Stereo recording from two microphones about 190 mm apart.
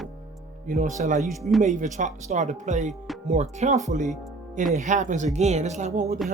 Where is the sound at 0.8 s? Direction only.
40° right (ahead or behind).